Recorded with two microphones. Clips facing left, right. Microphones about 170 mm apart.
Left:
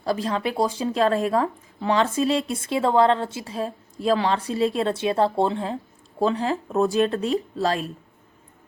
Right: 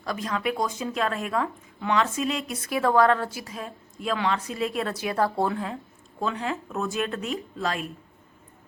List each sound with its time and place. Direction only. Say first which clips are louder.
0.0 s speech: left 4 dB; 30° left (ahead or behind)